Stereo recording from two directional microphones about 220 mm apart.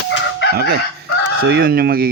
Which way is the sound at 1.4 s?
45° right (ahead or behind).